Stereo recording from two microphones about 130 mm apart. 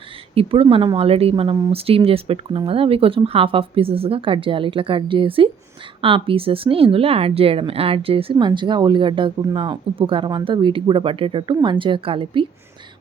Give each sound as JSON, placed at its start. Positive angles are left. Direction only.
{"t": 0.3, "sound": "speech", "side_deg": -45}